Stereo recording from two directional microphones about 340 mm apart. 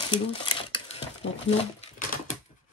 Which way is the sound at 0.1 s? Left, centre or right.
Centre.